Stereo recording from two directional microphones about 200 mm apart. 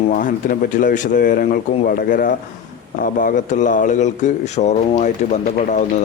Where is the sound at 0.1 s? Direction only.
45° left (ahead or behind).